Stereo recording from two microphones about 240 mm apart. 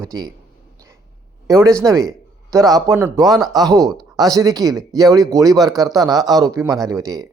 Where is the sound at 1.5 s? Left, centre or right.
Centre.